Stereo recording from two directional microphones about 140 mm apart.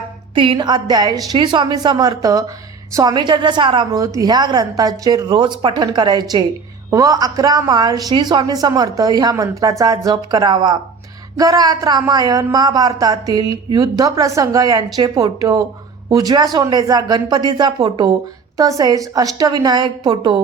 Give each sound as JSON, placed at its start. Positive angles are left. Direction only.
{"t": 0.3, "sound": "a woman's voice", "side_deg": -35}